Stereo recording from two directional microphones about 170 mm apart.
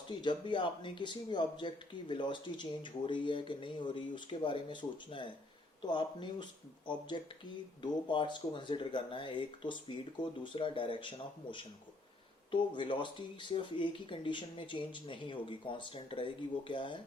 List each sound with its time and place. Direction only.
0.2 s speech: 30° left (ahead or behind)
12.5 s speech: 30° left (ahead or behind)